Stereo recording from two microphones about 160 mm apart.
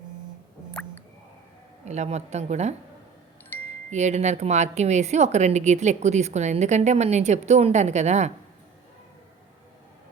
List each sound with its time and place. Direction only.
0.7 s music: 5° left (ahead or behind)
1.8 s speech: 45° right (ahead or behind)
3.5 s chime: 15° left (ahead or behind)
3.8 s speech: 45° right (ahead or behind)